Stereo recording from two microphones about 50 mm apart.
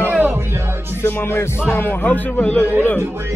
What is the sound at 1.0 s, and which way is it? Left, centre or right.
Music, left.